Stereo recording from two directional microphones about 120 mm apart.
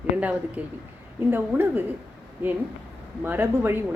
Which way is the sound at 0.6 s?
10° right (ahead or behind).